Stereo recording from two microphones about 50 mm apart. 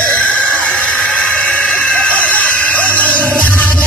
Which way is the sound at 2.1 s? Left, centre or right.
Left.